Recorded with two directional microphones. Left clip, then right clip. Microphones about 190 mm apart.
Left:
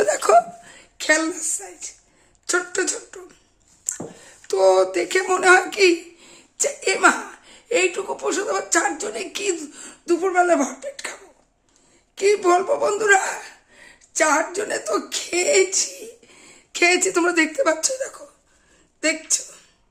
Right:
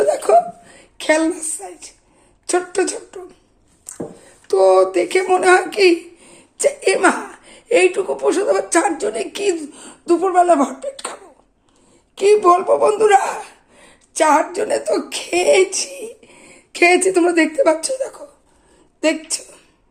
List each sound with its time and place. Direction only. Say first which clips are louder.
0.0 s hiccup: right 2 dB; 20° left (ahead or behind)
0.7 s a woman's voice: right 3 dB; centre (ahead or behind)
3.9 s a sound: left 2 dB; 10° left (ahead or behind)
4.4 s a woman's voice: right 4 dB; 5° left (ahead or behind)